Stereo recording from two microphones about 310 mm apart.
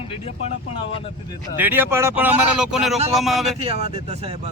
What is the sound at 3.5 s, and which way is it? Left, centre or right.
Speech, centre.